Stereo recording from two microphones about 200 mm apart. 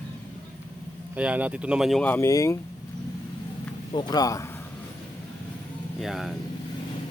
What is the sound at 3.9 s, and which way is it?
Speech, 20° left (ahead or behind).